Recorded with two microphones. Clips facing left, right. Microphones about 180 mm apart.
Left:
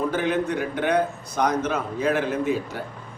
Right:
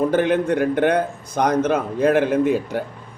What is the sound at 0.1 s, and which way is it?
A man's voice, 55° right (ahead or behind).